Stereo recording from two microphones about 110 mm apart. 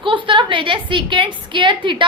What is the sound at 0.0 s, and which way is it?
A woman's voice, 45° right (ahead or behind).